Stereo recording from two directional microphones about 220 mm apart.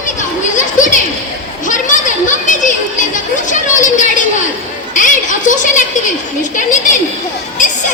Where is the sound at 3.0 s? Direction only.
35° left (ahead or behind).